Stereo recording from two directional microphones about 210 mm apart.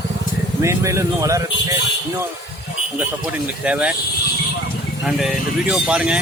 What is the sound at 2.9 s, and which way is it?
Speech, 5° right (ahead or behind).